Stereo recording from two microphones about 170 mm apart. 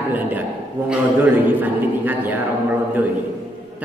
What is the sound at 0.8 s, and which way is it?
A man's voice, 10° right (ahead or behind).